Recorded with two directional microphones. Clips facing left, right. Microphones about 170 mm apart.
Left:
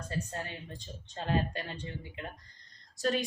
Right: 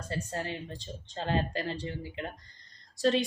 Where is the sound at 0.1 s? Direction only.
30° right (ahead or behind).